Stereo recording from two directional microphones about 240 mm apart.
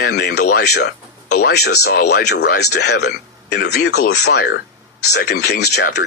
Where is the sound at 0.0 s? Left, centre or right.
Left.